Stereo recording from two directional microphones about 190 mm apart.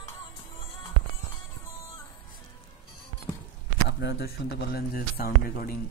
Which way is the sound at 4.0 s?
60° left (ahead or behind).